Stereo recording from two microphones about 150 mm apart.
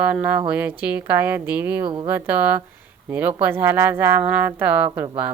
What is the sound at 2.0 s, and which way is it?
Speech, 10° right (ahead or behind).